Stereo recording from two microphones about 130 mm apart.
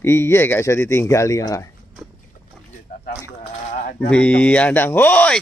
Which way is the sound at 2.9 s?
90° left.